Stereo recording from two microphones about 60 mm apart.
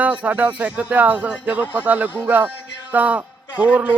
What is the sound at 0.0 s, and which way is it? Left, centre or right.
A man's voice, right.